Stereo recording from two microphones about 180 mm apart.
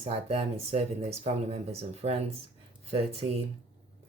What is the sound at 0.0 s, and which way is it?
Speech, 35° right (ahead or behind).